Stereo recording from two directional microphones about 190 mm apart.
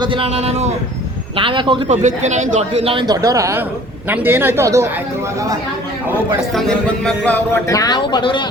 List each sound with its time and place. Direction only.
0.0 s a man's voice: 25° right (ahead or behind)
1.9 s a man's voice: 40° right (ahead or behind); by 4.9 s 15° right (ahead or behind)
6.5 s music: centre (ahead or behind)
7.7 s speech: 20° left (ahead or behind)